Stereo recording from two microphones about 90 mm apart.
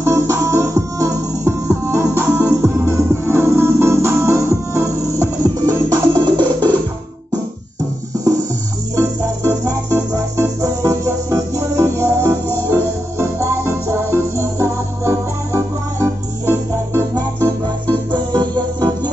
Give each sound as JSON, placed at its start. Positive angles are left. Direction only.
{"t": 0.0, "sound": "music", "side_deg": -35}
{"t": 8.9, "sound": "music", "side_deg": -40}
{"t": 17.1, "sound": "music", "side_deg": -50}